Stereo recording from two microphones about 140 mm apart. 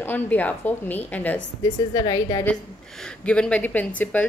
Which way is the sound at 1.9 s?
25° left (ahead or behind).